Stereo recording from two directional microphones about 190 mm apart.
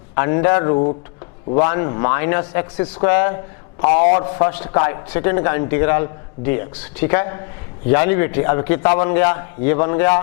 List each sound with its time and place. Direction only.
0.2 s a man's voice: 15° left (ahead or behind)